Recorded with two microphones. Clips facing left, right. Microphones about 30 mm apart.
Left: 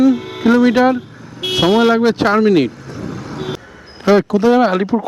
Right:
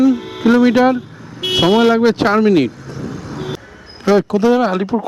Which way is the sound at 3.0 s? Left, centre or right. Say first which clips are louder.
Left 1 dB; centre.